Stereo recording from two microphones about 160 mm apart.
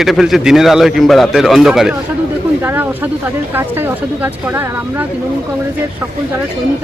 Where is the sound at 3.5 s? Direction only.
15° right (ahead or behind).